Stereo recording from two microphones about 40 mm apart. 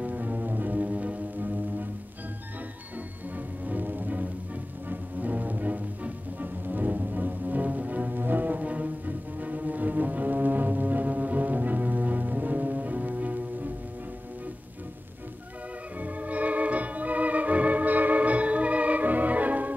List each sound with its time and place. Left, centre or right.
0.0 s music: right
3.3 s music: right
16.0 s organ: right